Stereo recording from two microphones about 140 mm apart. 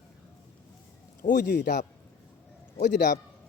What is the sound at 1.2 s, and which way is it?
Speech, 70° left (ahead or behind).